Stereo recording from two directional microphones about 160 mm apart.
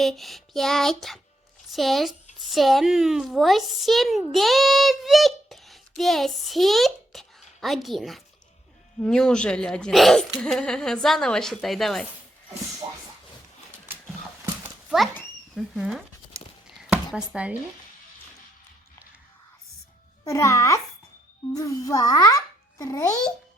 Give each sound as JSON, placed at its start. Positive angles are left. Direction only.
{"t": 0.0, "sound": "a woman's voice", "side_deg": 0}
{"t": 14.6, "sound": "horse", "side_deg": -5}
{"t": 15.5, "sound": "a woman's voice", "side_deg": 0}
{"t": 16.8, "sound": "a sound", "side_deg": -5}
{"t": 17.3, "sound": "speech", "side_deg": -10}
{"t": 20.2, "sound": "a child's voice", "side_deg": 20}